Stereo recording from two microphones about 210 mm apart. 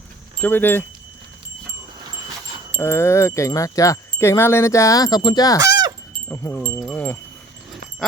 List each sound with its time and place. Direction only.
0.4 s wind chime: 10° left (ahead or behind)
2.7 s wind chime: 10° left (ahead or behind)
5.5 s fowl: 20° right (ahead or behind)
6.3 s wind chime: 10° left (ahead or behind)